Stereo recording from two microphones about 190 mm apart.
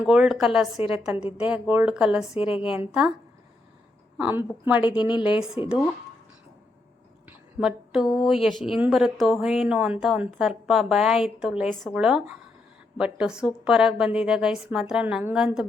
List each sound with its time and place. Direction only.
0.0 s a woman's voice: 5° right (ahead or behind)
4.2 s a woman's voice: 10° right (ahead or behind)
4.8 s a woman's voice: 25° left (ahead or behind)
5.4 s speech: 5° right (ahead or behind)
7.3 s speech: centre (ahead or behind)